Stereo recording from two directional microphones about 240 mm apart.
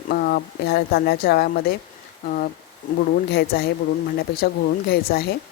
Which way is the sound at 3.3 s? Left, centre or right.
Left.